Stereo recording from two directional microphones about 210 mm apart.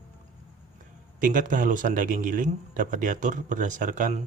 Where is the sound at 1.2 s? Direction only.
40° right (ahead or behind).